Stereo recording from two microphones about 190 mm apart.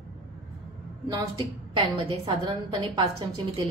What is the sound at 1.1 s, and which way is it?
A woman's voice, 25° right (ahead or behind).